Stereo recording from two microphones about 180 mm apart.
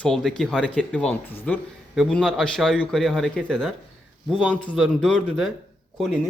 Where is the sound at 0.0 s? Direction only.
Centre (ahead or behind).